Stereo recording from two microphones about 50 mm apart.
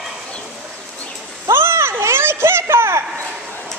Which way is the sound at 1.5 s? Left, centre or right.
Right.